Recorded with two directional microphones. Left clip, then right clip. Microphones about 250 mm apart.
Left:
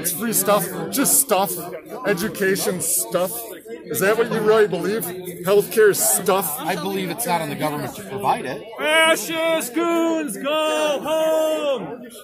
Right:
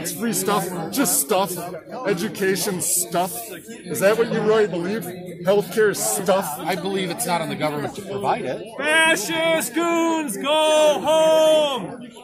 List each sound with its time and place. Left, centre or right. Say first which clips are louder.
0.0 s speech: left 1 dB; left
3.1 s a man's voice: left 1 dB; centre
4.0 s a man's voice: even; left
6.7 s a man's voice: even; centre
8.7 s a sound: left 1 dB; centre; by 11.7 s right